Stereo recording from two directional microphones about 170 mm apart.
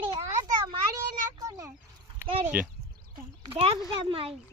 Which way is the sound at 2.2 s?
35° right (ahead or behind).